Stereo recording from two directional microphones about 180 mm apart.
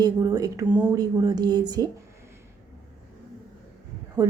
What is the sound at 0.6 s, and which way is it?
Speech, 10° right (ahead or behind).